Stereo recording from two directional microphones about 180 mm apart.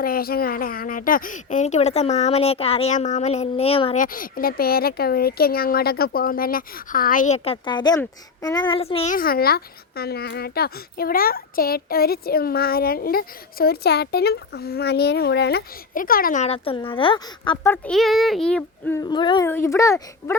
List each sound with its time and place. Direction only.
0.0 s speech: 55° left (ahead or behind); by 3.9 s 30° left (ahead or behind)
3.9 s speech: 50° left (ahead or behind); by 9.1 s 35° left (ahead or behind)
9.1 s speech: 55° left (ahead or behind)
16.4 s speech: 30° left (ahead or behind)
17.6 s speech: 10° left (ahead or behind)
17.9 s child singing: centre (ahead or behind)
18.9 s speech: 25° left (ahead or behind)
19.5 s speech: 15° left (ahead or behind)